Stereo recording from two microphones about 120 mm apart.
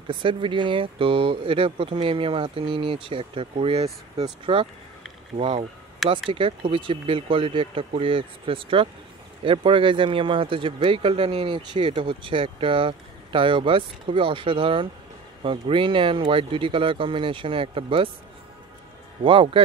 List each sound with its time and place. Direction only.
0.1 s speech: 45° right (ahead or behind)
6.0 s speech: centre (ahead or behind)
6.3 s speech: 45° right (ahead or behind)
19.2 s speech: 45° right (ahead or behind)